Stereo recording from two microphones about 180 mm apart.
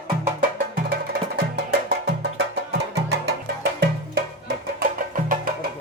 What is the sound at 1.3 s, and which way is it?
Music, 65° right (ahead or behind).